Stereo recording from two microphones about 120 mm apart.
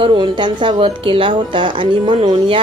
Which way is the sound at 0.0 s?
45° right (ahead or behind).